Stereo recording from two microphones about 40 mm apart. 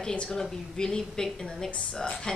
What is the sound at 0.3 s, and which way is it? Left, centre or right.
A woman's voice, centre.